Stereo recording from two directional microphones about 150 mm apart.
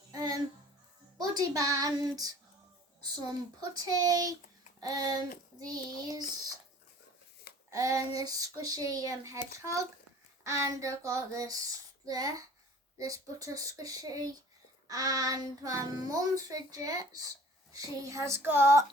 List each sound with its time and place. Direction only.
0.1 s music: 25° right (ahead or behind)
1.2 s a child's voice: 25° right (ahead or behind)
3.6 s a child's voice: 25° right (ahead or behind)
7.7 s a child's voice: 20° right (ahead or behind)
10.4 s a child's voice: 20° right (ahead or behind)